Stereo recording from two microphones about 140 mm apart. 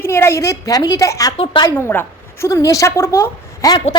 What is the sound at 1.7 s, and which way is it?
A woman's voice, 15° left (ahead or behind).